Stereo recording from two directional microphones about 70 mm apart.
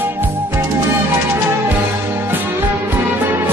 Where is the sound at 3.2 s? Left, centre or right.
Right.